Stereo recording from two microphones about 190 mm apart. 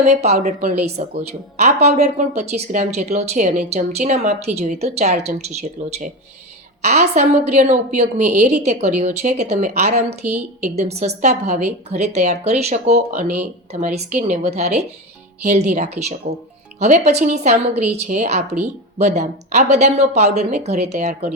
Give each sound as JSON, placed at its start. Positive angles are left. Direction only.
{"t": 0.0, "sound": "speech", "side_deg": -35}
{"t": 10.2, "sound": "a woman's voice", "side_deg": -5}
{"t": 10.8, "sound": "speech", "side_deg": -35}